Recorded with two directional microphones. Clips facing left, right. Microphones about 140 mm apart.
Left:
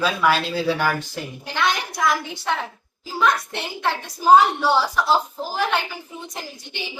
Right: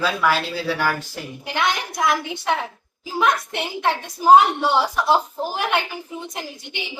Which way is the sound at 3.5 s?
15° right (ahead or behind).